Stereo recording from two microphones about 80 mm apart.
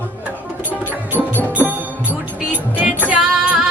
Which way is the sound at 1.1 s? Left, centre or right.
Right.